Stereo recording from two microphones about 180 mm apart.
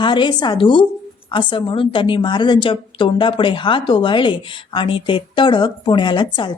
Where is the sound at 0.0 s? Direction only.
25° left (ahead or behind).